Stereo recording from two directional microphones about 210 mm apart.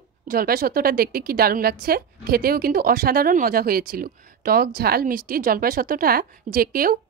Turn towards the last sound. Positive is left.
turn(degrees=-45)  # may be behind; listen again after turning